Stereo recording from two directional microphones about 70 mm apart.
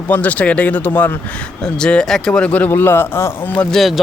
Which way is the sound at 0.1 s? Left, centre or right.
Left.